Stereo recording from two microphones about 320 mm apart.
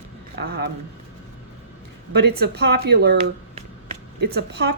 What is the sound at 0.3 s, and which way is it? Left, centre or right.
Speech, right.